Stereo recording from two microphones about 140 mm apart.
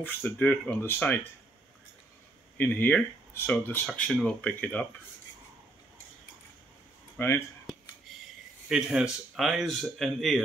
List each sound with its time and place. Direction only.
0.0 s speech: 10° left (ahead or behind)
2.5 s speech: 10° left (ahead or behind)
3.8 s speech: 5° left (ahead or behind)
7.2 s speech: 15° left (ahead or behind)
8.6 s speech: 5° right (ahead or behind)